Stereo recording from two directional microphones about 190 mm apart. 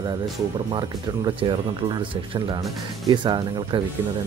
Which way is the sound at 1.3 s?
25° right (ahead or behind).